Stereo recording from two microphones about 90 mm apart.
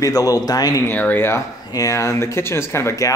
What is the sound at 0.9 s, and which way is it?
Speech, 20° left (ahead or behind).